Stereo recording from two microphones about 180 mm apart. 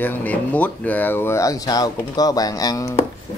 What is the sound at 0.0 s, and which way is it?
Speech, 10° left (ahead or behind).